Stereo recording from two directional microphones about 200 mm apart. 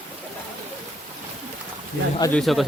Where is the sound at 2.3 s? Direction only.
Centre (ahead or behind).